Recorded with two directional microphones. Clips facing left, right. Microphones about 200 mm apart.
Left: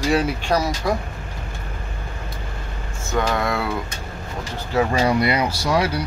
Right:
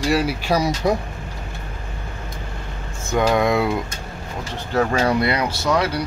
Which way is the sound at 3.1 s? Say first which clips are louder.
Right 4 dB; 15° right (ahead or behind).